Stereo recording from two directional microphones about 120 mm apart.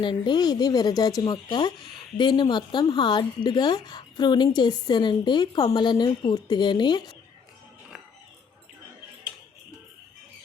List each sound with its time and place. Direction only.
0.0 s speech: 40° left (ahead or behind)